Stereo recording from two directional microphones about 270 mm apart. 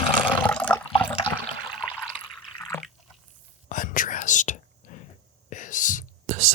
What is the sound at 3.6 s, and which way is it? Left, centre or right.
Whispering, left.